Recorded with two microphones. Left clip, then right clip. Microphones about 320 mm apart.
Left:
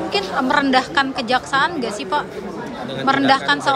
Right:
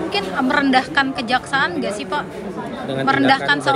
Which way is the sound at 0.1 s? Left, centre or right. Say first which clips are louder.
Left 1 dB; centre.